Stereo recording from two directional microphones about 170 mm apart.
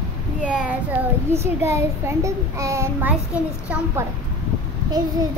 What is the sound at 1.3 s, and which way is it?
A child's voice, 15° right (ahead or behind).